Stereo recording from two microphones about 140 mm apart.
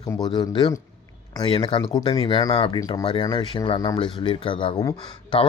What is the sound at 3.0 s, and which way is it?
Speech, 35° left (ahead or behind).